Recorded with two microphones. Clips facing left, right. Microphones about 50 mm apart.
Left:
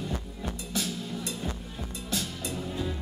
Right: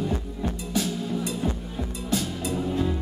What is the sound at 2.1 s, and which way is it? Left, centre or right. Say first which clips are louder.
Music: right 6 dB; centre.